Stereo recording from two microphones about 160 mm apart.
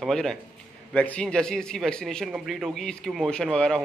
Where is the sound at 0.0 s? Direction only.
5° left (ahead or behind).